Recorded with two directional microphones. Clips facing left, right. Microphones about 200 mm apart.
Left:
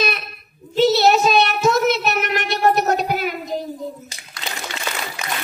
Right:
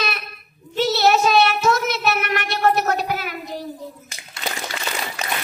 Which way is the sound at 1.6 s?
15° left (ahead or behind).